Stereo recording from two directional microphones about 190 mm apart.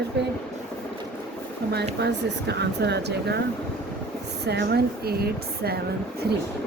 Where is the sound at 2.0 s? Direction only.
60° right (ahead or behind).